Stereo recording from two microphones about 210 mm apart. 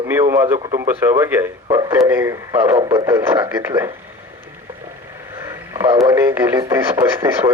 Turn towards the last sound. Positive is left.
turn(degrees=-15)  # may be behind; listen again after turning